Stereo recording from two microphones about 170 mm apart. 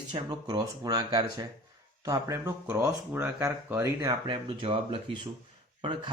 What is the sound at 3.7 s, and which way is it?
Speech, 20° right (ahead or behind).